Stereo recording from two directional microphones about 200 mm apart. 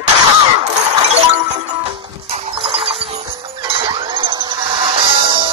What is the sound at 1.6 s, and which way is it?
Music, 25° right (ahead or behind).